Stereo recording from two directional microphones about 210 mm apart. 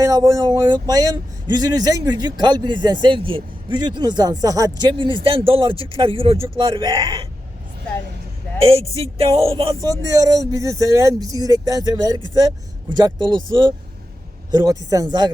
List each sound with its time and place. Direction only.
0.0 s speech: 15° right (ahead or behind)
9.4 s speech: 25° right (ahead or behind)